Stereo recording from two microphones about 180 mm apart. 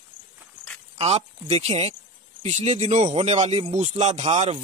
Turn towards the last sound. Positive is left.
turn(degrees=-35)  # may be behind; listen again after turning